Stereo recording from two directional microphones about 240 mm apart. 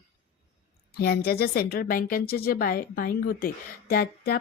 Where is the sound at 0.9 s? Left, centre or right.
Left.